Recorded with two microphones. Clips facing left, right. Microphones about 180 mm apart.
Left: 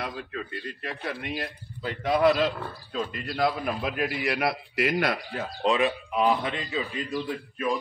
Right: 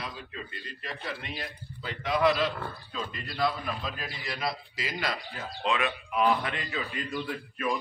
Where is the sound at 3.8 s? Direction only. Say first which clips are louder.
Left 10 dB; 65° left (ahead or behind); by 5.8 s 40° left (ahead or behind).